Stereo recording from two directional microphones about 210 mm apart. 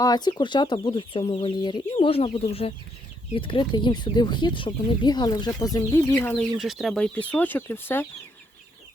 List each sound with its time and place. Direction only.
0.0 s speech: 20° left (ahead or behind)
6.6 s speech: centre (ahead or behind)